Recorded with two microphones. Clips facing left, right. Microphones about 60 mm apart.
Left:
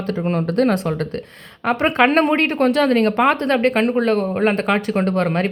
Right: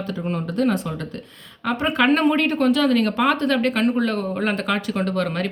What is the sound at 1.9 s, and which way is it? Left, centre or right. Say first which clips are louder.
Speech: left 1 dB; left.